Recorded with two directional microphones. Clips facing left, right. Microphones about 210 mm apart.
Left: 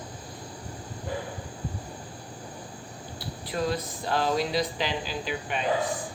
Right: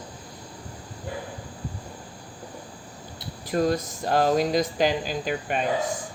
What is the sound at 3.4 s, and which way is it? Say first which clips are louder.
Speech: right 6 dB; 45° right (ahead or behind).